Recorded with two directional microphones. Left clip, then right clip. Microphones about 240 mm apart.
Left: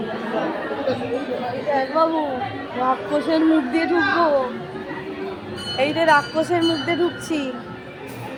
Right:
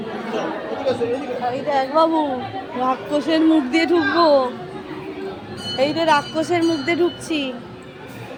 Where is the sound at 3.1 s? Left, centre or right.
Centre.